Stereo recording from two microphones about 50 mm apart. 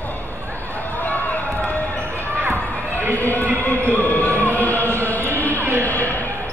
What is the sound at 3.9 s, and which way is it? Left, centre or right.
Music, left.